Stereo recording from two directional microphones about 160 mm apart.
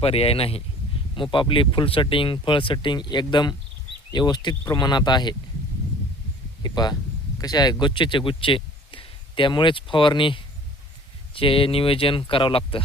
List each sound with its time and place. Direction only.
0.0 s speech: 35° left (ahead or behind)
6.6 s speech: 25° left (ahead or behind)